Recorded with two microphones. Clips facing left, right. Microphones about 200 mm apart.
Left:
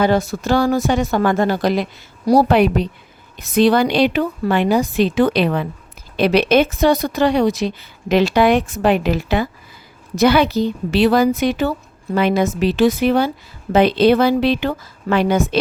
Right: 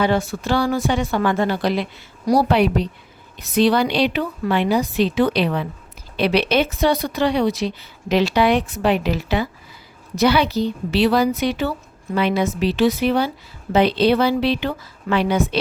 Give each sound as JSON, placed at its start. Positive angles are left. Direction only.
{"t": 0.0, "sound": "a woman's voice", "side_deg": 40}